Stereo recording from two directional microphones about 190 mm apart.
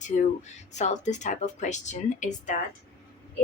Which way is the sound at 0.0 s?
40° left (ahead or behind).